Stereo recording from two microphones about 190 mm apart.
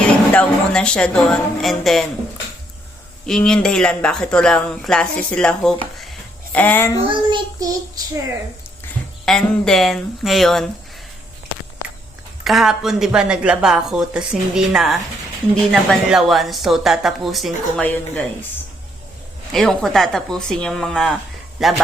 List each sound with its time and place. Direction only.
0.0 s a woman's voice: 5° left (ahead or behind)
3.2 s speech: 5° left (ahead or behind)
7.3 s child singing: 20° right (ahead or behind)
9.2 s speech: centre (ahead or behind)
12.5 s speech: centre (ahead or behind)
19.5 s speech: centre (ahead or behind)